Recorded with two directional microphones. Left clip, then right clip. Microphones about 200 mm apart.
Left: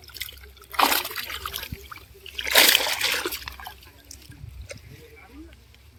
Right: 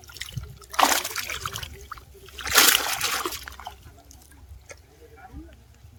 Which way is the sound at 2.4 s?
10° right (ahead or behind).